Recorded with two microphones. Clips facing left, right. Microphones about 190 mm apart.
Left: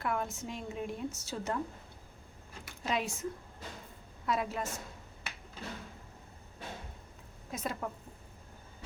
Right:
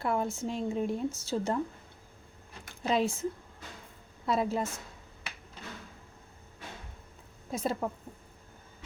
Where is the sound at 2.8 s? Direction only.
30° right (ahead or behind).